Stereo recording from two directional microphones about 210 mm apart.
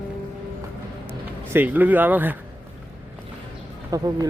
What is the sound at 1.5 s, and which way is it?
Speech, 10° right (ahead or behind).